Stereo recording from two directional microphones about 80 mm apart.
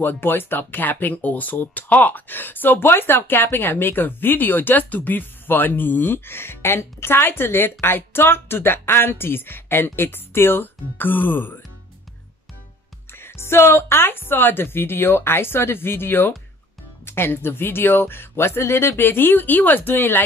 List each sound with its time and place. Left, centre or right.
0.0 s speech: left
13.2 s speech: left